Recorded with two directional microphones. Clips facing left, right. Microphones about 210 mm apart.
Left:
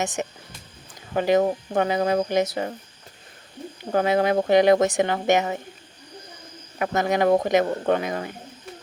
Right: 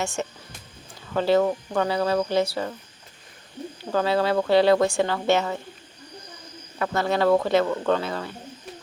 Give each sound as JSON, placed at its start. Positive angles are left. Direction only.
{"t": 0.0, "sound": "speech", "side_deg": 20}
{"t": 3.8, "sound": "speech", "side_deg": 20}
{"t": 6.7, "sound": "speech", "side_deg": 20}